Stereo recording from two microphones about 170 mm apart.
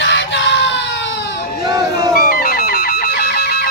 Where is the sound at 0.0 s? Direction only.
90° left.